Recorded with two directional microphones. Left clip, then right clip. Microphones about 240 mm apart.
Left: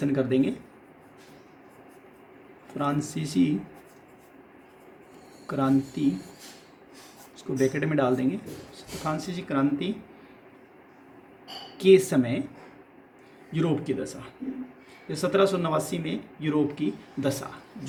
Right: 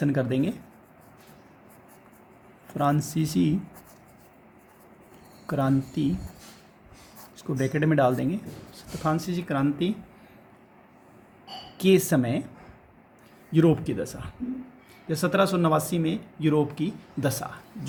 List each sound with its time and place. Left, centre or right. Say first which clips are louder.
0.0 s speech: left 1 dB; right
2.6 s speech: right 3 dB; right
5.5 s speech: left 1 dB; right
7.3 s speech: left 2 dB; right
11.8 s speech: left 3 dB; right
13.5 s speech: right 5 dB; right